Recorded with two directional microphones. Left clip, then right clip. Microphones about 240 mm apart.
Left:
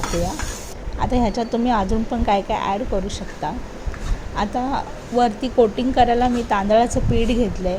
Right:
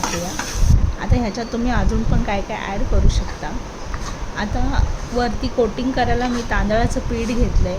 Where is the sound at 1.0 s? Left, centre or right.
Centre.